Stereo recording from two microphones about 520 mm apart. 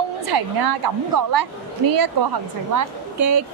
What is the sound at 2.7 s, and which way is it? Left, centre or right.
Speech, right.